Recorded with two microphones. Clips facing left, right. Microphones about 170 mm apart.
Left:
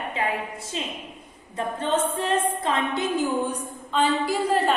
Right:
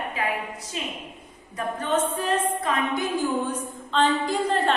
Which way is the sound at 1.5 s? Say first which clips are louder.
Even; 25° left (ahead or behind).